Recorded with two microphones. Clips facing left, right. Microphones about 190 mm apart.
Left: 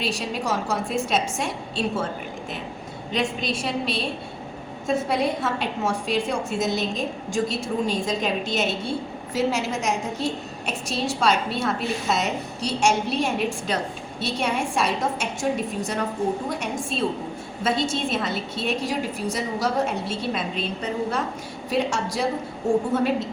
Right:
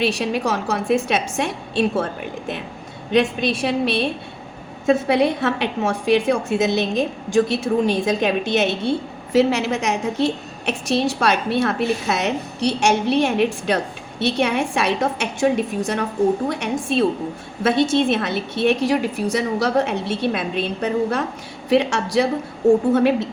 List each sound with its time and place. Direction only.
0.0 s a woman's voice: 65° right (ahead or behind)
3.1 s a woman's voice: 65° right (ahead or behind)
16.5 s a woman's voice: 70° right (ahead or behind)